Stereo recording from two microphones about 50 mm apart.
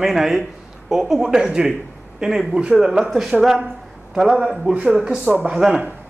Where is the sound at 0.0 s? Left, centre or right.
Centre.